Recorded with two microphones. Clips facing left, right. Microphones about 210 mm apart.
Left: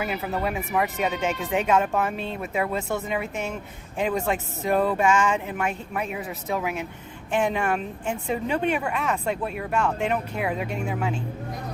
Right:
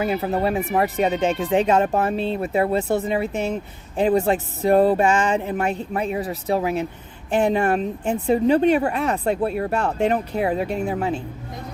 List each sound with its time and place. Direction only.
0.0 s speech: 35° right (ahead or behind)